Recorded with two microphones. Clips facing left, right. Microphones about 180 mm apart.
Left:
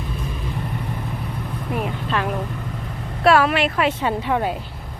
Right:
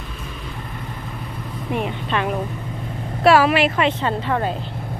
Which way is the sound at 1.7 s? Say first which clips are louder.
Right 1 dB; centre (ahead or behind).